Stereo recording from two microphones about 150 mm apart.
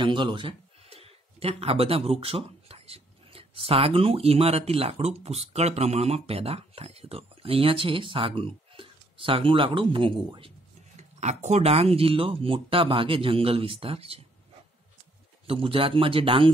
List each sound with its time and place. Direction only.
0.0 s speech: 30° right (ahead or behind)
11.0 s speech: 50° right (ahead or behind)
15.4 s speech: 35° right (ahead or behind)